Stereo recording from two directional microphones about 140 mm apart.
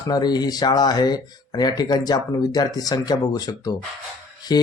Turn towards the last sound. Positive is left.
turn(degrees=30)  # may be behind; listen again after turning